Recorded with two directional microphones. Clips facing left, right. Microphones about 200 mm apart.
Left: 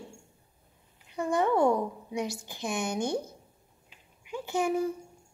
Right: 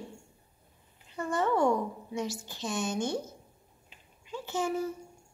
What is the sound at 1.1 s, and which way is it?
A woman's voice, 15° left (ahead or behind).